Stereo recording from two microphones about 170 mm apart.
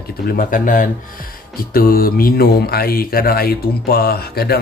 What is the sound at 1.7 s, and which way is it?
Speech, 60° left (ahead or behind).